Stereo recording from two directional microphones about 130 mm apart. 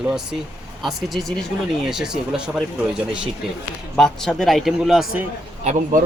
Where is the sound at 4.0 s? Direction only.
5° left (ahead or behind).